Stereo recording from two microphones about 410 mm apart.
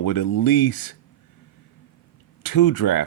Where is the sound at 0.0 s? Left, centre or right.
Left.